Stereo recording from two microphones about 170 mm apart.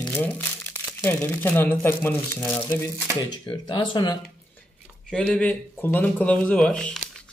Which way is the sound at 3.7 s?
30° left (ahead or behind).